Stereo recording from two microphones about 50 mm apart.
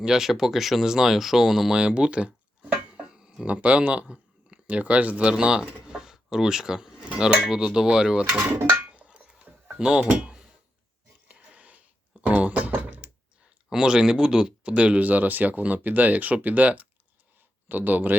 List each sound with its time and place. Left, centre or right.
0.0 s speech: centre
1.7 s speech: centre
3.1 s a sound: centre
3.4 s speech: right
5.4 s speech: centre
8.8 s a sound: right
9.7 s speech: centre
10.2 s a sound: right
13.7 s speech: centre
14.7 s speech: right